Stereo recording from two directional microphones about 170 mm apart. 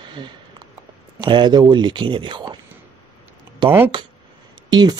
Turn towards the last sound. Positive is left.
turn(degrees=-25)  # may be behind; listen again after turning